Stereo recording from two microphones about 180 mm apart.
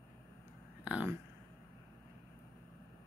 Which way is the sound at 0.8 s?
10° right (ahead or behind).